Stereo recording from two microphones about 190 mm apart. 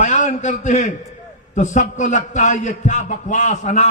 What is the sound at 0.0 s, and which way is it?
A man's voice, 40° left (ahead or behind).